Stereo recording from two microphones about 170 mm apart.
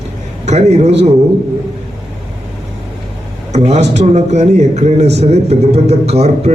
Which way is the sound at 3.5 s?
40° right (ahead or behind).